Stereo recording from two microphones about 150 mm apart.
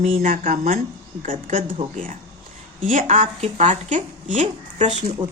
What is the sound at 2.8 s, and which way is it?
A woman's voice, 60° right (ahead or behind).